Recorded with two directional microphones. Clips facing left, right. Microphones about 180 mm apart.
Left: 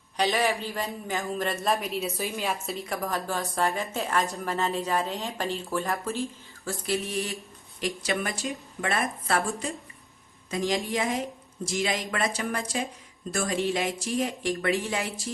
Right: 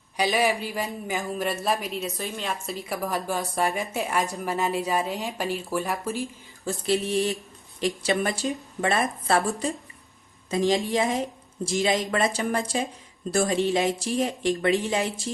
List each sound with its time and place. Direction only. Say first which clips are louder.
0.2 s a woman's voice: right 2 dB; 10° right (ahead or behind)
6.7 s speech: right 5 dB; 25° right (ahead or behind)